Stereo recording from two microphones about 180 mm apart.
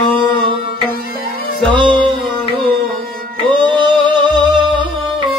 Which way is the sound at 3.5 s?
25° right (ahead or behind).